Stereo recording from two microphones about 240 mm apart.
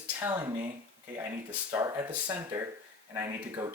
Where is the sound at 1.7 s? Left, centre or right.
Centre.